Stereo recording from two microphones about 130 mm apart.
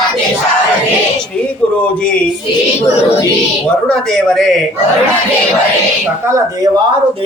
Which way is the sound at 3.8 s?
Centre (ahead or behind).